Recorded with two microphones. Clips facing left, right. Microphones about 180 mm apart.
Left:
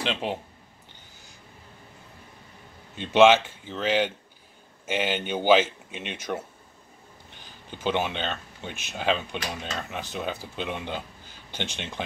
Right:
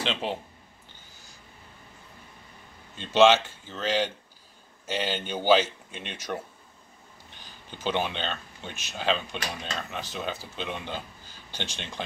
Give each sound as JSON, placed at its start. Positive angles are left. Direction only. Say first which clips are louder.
{"t": 0.0, "sound": "speech", "louder": "left 1 dB", "side_deg": 10}
{"t": 3.0, "sound": "speech", "louder": "left 2 dB", "side_deg": 10}
{"t": 7.8, "sound": "speech", "louder": "left 2 dB", "side_deg": 10}
{"t": 11.5, "sound": "speech", "louder": "left 3 dB", "side_deg": 55}